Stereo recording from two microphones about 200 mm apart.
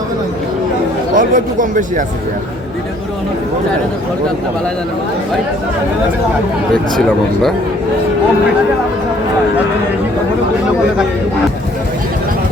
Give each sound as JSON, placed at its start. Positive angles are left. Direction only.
{"t": 1.1, "sound": "speech", "side_deg": -40}